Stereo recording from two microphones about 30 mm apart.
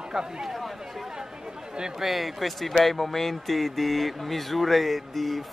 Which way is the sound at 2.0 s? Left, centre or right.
Centre.